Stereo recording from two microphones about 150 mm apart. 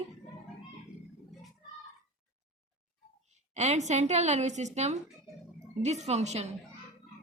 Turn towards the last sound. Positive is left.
turn(degrees=-50)  # may be behind; listen again after turning